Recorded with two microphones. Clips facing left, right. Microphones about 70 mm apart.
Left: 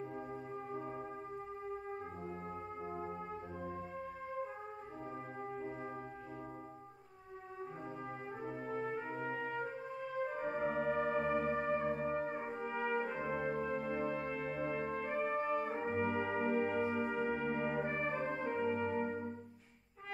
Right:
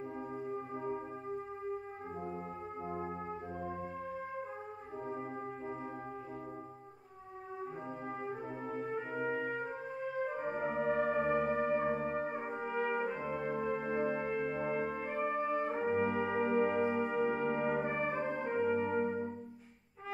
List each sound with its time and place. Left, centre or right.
0.5 s singing bowl: centre
2.9 s brass instrument: centre
8.3 s brass instrument: centre
13.5 s brass instrument: centre
15.5 s brass instrument: centre
15.8 s brass instrument: centre